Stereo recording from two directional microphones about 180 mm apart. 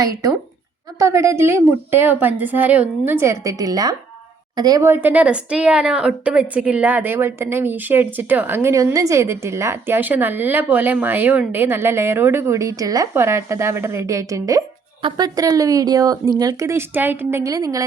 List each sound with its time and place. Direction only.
0.0 s a woman's voice: 20° right (ahead or behind)